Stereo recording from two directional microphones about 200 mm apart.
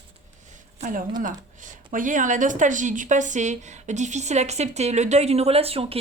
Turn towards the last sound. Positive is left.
turn(degrees=-30)  # may be behind; listen again after turning